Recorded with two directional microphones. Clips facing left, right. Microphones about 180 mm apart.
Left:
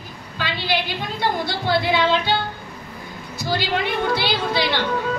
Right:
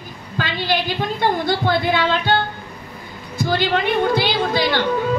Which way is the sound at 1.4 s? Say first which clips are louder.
Right 3 dB; 50° right (ahead or behind).